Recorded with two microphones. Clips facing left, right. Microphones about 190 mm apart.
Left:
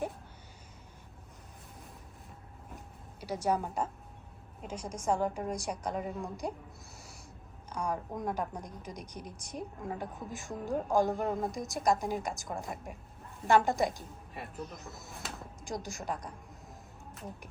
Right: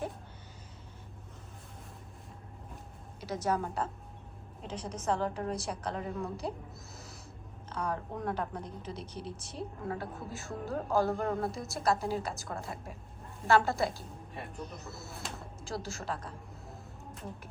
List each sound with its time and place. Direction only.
3.2 s a woman's voice: 10° left (ahead or behind)
6.9 s owl: 10° left (ahead or behind)
7.7 s a woman's voice: 10° left (ahead or behind)